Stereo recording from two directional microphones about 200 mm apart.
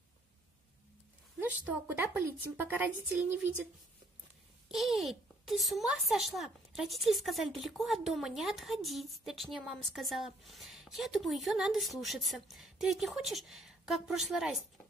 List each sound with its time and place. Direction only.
1.4 s a woman's voice: 10° right (ahead or behind)
4.6 s a child's voice: centre (ahead or behind)